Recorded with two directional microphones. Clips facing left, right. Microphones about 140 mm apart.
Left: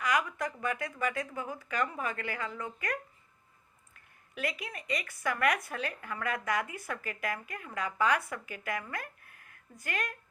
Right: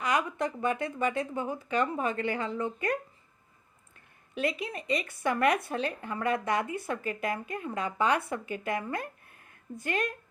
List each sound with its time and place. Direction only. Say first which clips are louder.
0.0 s speech: right 2 dB; 25° right (ahead or behind)
4.4 s speech: right 6 dB; 25° right (ahead or behind)